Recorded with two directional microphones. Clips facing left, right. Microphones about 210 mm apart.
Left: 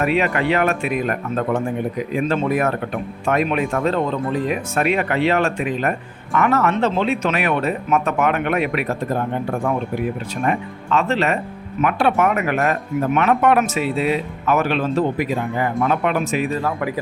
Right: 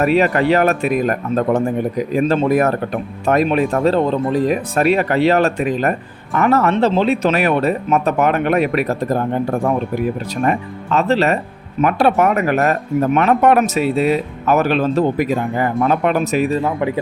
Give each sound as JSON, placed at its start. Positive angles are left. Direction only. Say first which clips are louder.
{"t": 0.0, "sound": "speech", "louder": "right 5 dB", "side_deg": -40}
{"t": 10.9, "sound": "speech", "louder": "right 4 dB", "side_deg": -35}